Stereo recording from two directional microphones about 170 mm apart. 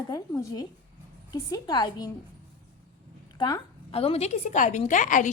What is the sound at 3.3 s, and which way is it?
Speech, 25° left (ahead or behind).